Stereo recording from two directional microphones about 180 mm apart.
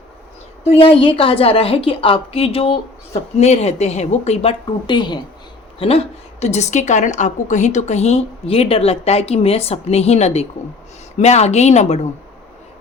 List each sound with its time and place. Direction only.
0.6 s a woman's voice: 35° left (ahead or behind)